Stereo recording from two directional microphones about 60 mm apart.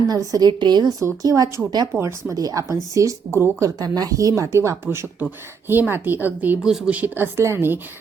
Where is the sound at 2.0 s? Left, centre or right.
Right.